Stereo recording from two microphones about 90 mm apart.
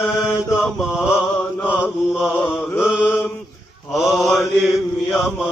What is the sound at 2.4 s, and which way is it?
Chant, 20° left (ahead or behind).